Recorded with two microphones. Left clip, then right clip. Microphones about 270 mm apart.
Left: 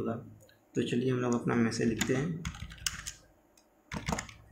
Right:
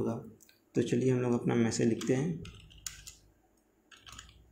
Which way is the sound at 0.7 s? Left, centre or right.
Centre.